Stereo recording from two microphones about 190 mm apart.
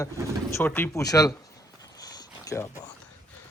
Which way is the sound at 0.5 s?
10° left (ahead or behind).